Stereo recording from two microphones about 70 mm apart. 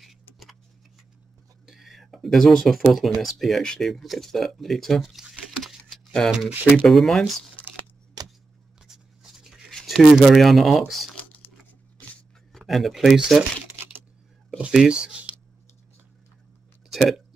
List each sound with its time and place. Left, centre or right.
0.0 s vehicle: centre
1.7 s speech: centre
5.6 s a sound: centre
6.2 s speech: centre
8.2 s a sound: right
8.8 s a sound: centre
9.7 s speech: centre
12.5 s speech: centre
14.6 s speech: centre
16.9 s speech: centre